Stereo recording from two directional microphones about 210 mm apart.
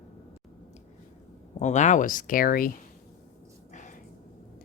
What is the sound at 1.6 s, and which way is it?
Speech, 35° left (ahead or behind).